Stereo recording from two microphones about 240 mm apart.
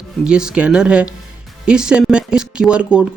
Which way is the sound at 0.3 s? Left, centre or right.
Centre.